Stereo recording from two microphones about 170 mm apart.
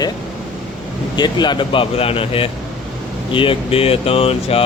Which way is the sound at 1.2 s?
25° left (ahead or behind).